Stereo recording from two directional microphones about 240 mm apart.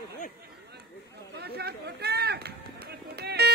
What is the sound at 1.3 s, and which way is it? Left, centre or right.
Run, right.